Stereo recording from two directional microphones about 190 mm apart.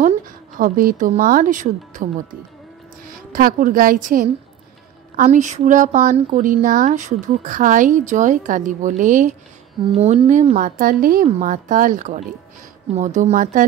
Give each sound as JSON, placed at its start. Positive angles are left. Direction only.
{"t": 0.6, "sound": "a woman's voice", "side_deg": -45}
{"t": 3.3, "sound": "a woman's voice", "side_deg": -45}